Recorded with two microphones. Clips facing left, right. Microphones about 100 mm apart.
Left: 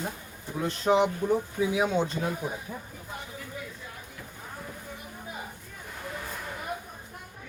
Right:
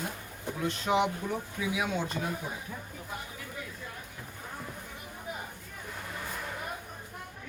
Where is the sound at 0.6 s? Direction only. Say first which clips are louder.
Left 4 dB; 35° left (ahead or behind).